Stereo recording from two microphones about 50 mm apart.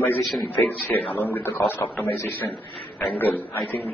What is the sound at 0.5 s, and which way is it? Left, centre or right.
A man's voice, left.